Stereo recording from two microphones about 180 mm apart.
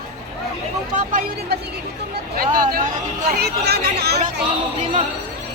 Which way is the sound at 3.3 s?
60° right (ahead or behind).